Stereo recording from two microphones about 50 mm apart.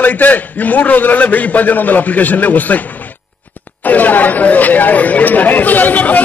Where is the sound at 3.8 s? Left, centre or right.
Left.